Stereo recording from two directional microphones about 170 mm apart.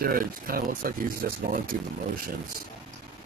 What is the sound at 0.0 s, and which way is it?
Speech, 60° right (ahead or behind).